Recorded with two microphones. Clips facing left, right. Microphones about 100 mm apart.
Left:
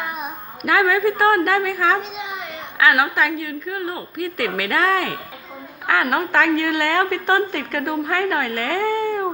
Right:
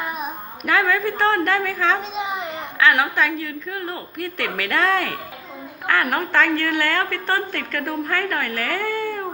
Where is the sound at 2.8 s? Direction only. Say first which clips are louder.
Left 1 dB; 5° left (ahead or behind).